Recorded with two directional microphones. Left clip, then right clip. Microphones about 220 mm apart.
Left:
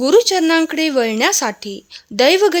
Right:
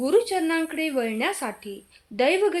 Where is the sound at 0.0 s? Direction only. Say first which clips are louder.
Left 9 dB; 50° left (ahead or behind).